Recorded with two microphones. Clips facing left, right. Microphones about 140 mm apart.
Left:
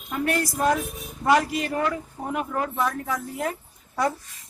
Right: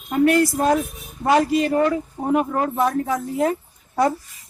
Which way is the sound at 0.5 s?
30° right (ahead or behind).